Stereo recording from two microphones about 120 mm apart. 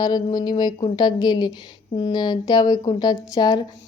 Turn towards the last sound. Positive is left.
turn(degrees=35)  # may be behind; listen again after turning